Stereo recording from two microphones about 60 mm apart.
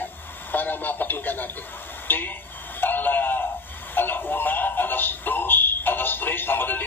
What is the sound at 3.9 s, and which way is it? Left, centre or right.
Synthetic singing, left.